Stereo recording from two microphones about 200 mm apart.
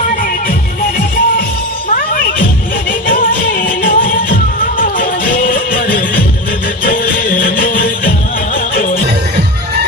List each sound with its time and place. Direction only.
1.9 s music: 45° left (ahead or behind)